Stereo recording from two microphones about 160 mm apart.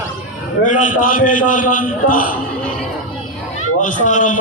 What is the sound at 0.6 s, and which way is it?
A man's voice, 50° left (ahead or behind).